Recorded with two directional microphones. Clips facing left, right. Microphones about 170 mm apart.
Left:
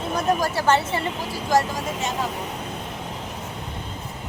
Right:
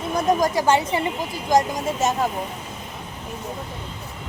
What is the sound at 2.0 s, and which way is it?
Speech, 45° right (ahead or behind).